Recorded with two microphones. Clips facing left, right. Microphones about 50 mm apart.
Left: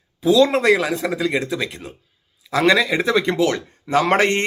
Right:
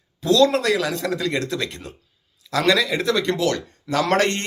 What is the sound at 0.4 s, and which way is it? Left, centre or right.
Speech, left.